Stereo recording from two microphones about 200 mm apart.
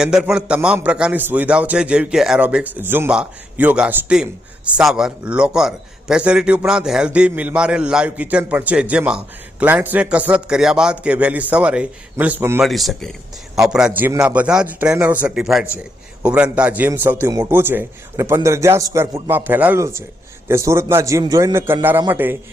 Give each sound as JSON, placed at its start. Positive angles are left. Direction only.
{"t": 0.0, "sound": "a man's voice", "side_deg": -5}
{"t": 12.6, "sound": "a man's voice", "side_deg": 0}